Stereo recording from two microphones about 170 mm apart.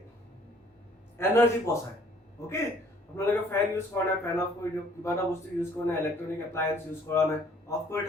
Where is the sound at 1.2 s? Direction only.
15° left (ahead or behind).